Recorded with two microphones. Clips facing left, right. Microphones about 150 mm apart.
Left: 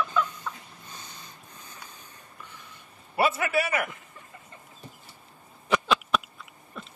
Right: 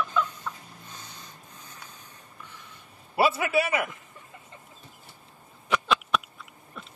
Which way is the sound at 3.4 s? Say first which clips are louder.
Right 1 dB; 25° right (ahead or behind).